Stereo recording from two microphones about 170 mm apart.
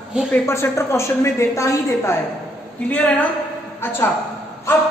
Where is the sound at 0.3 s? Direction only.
15° left (ahead or behind).